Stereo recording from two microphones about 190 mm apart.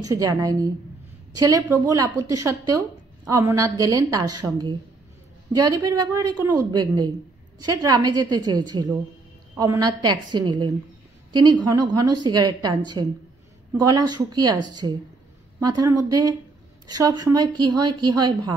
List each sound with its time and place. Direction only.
0.0 s a woman's voice: 20° right (ahead or behind)